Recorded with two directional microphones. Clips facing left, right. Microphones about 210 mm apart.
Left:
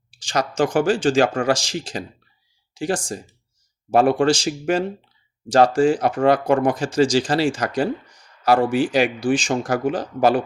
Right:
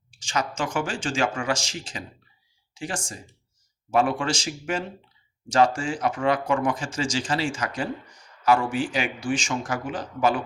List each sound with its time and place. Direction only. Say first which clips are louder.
0.1 s speech: left 5 dB; 35° left (ahead or behind)
5.5 s speech: left 7 dB; 35° left (ahead or behind)